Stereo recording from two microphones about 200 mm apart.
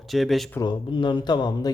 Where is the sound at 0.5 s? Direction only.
25° left (ahead or behind).